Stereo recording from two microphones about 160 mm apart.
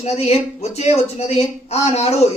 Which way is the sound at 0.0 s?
40° left (ahead or behind).